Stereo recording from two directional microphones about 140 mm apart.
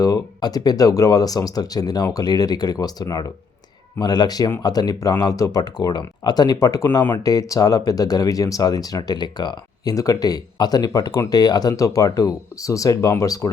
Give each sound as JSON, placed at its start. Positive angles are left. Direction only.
{"t": 0.0, "sound": "speech", "side_deg": 30}
{"t": 7.2, "sound": "speech", "side_deg": 25}